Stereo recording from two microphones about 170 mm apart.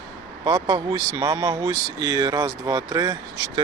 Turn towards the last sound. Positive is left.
turn(degrees=-20)  # may be behind; listen again after turning